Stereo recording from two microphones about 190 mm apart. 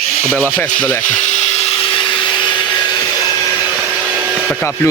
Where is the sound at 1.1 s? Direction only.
35° left (ahead or behind).